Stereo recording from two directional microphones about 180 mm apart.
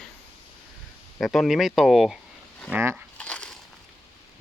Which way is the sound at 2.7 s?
10° right (ahead or behind).